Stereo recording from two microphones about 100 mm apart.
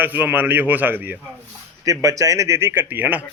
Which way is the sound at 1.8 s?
35° right (ahead or behind).